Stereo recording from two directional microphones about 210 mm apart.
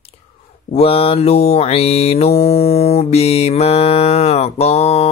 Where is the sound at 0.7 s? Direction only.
25° left (ahead or behind).